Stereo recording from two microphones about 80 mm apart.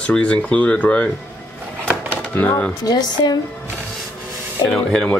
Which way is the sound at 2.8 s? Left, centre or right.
Left.